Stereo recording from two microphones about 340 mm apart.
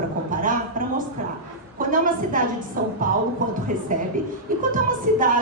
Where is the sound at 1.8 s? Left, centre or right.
Right.